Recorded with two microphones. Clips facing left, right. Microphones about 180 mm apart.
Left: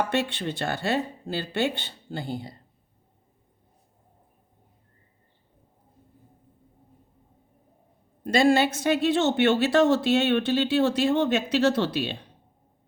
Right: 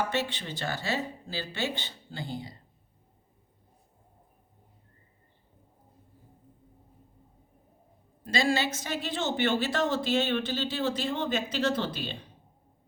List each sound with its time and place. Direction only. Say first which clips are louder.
0.1 s speech: left 5 dB; 65° left (ahead or behind)
8.2 s a woman's voice: left 7 dB; 60° left (ahead or behind)